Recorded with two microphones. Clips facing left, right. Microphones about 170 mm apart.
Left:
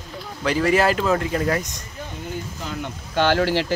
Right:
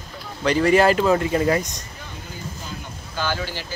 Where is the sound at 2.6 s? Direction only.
70° left (ahead or behind).